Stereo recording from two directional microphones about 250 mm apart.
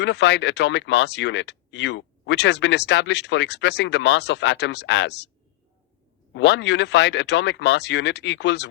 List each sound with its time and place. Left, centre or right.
0.0 s speech: left
6.3 s speech: left